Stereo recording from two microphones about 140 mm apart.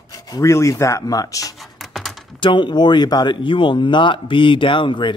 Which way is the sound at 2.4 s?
35° left (ahead or behind).